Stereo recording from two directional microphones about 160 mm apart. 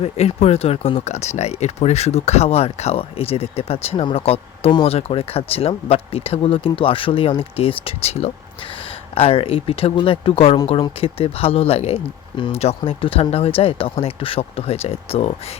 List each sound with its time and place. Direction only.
0.0 s speech: 40° left (ahead or behind)